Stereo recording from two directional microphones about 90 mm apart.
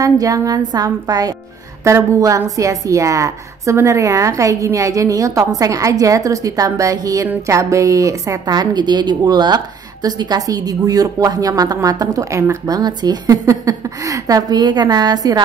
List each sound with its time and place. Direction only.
0.0 s a woman's voice: 40° right (ahead or behind)